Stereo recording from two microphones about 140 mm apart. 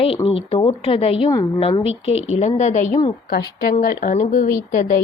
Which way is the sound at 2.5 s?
55° left (ahead or behind).